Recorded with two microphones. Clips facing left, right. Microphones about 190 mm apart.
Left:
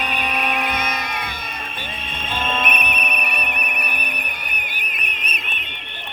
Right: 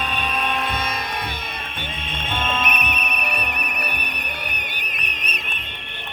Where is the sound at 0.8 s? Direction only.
30° right (ahead or behind).